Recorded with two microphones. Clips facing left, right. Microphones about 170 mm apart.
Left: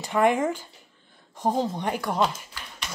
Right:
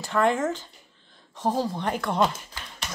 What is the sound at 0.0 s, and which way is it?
Speech, 15° left (ahead or behind).